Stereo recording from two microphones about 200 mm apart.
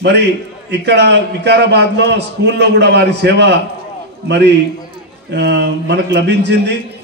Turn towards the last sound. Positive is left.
turn(degrees=-60)  # may be behind; listen again after turning